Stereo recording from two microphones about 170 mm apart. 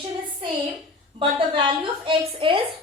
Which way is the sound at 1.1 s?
30° right (ahead or behind).